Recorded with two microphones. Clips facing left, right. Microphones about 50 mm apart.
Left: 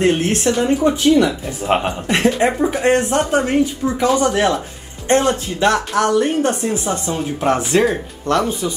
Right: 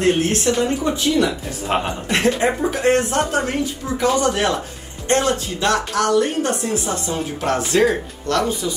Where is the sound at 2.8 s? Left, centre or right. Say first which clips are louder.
Left 1 dB; left.